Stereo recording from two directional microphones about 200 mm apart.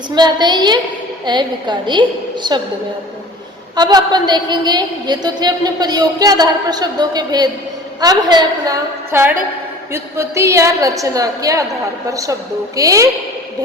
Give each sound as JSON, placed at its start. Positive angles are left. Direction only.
{"t": 0.1, "sound": "a woman's voice", "side_deg": -20}
{"t": 3.8, "sound": "a woman's voice", "side_deg": -20}